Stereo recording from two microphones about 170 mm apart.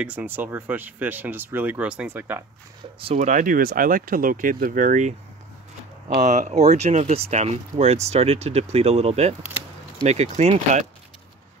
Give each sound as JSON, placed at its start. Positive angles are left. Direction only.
{"t": 0.0, "sound": "speech", "side_deg": -10}
{"t": 3.2, "sound": "speech", "side_deg": -50}
{"t": 6.2, "sound": "speech", "side_deg": -45}